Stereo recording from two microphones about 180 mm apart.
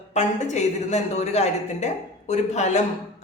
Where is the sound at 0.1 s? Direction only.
40° left (ahead or behind).